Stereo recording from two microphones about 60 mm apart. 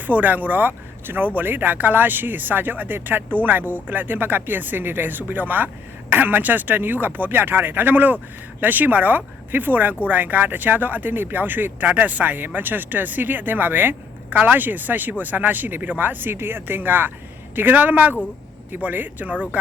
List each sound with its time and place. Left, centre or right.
0.1 s speech: right